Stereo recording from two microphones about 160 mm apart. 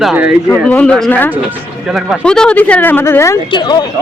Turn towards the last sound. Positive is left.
turn(degrees=25)  # may be behind; listen again after turning